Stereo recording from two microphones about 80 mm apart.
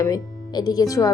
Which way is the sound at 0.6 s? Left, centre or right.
Left.